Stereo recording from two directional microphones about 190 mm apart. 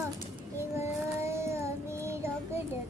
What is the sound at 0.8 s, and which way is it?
Child singing, 15° right (ahead or behind).